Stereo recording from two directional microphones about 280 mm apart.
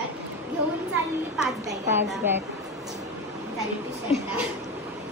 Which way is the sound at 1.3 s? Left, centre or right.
Centre.